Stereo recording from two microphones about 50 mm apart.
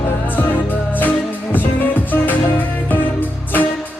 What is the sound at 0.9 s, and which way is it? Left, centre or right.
Music, left.